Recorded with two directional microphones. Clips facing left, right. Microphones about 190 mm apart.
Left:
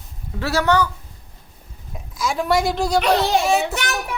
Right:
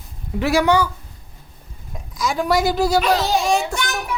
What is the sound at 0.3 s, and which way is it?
Speech, 15° right (ahead or behind).